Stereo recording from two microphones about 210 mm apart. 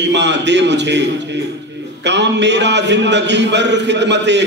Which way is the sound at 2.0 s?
55° right (ahead or behind).